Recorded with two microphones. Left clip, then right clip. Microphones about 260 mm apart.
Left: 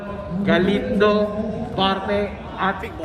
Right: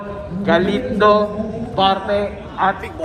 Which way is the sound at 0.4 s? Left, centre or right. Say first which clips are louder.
Right 3 dB; centre.